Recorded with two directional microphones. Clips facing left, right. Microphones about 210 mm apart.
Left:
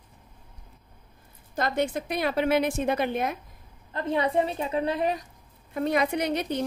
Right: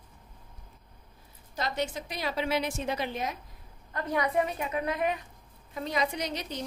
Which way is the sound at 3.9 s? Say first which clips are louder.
Left 3 dB; 25° left (ahead or behind).